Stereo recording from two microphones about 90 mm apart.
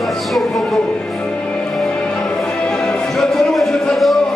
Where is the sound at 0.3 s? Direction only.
Centre (ahead or behind).